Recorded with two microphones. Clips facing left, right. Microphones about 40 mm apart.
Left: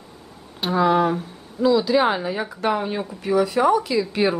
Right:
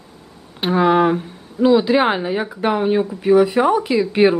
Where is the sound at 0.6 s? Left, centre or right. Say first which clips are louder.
Right 4 dB; right.